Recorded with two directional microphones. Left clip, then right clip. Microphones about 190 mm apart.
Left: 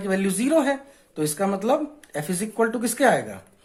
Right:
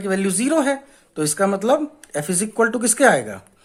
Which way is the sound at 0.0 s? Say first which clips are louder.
Right 3 dB; 25° right (ahead or behind).